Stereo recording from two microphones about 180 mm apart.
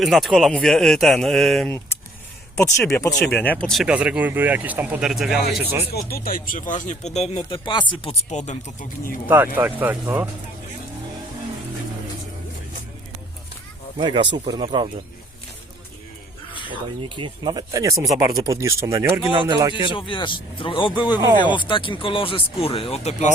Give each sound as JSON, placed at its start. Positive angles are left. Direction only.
{"t": 0.0, "sound": "speech", "side_deg": 0}
{"t": 2.6, "sound": "speech", "side_deg": 15}
{"t": 5.9, "sound": "speech", "side_deg": 60}
{"t": 8.3, "sound": "speech", "side_deg": 40}
{"t": 9.2, "sound": "speech", "side_deg": -10}
{"t": 14.0, "sound": "speech", "side_deg": -25}
{"t": 17.0, "sound": "speech", "side_deg": -25}
{"t": 19.3, "sound": "speech", "side_deg": -30}
{"t": 19.9, "sound": "speech", "side_deg": 25}